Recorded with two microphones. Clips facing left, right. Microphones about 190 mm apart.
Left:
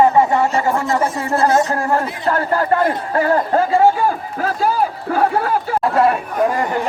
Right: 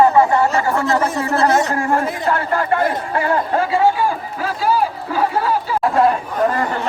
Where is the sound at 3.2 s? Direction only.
40° left (ahead or behind).